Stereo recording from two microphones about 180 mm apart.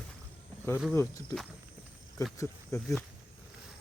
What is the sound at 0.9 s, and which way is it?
Speech, 15° left (ahead or behind).